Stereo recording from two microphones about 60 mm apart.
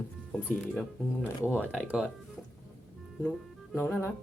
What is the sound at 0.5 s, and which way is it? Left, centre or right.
Speech, left.